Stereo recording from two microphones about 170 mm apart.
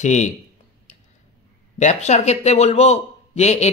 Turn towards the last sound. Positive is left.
turn(degrees=40)  # may be behind; listen again after turning